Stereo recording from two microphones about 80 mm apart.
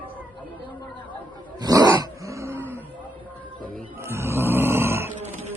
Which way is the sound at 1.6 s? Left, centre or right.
Right.